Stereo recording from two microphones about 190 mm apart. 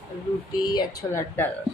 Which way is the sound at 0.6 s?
20° left (ahead or behind).